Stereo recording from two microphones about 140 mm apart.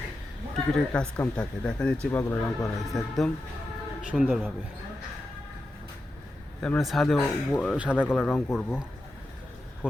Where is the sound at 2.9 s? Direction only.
Centre (ahead or behind).